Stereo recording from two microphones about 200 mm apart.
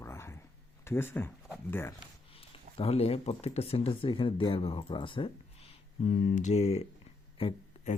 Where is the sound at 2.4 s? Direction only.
30° left (ahead or behind).